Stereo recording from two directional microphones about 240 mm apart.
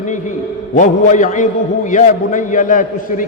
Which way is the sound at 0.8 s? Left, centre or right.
Left.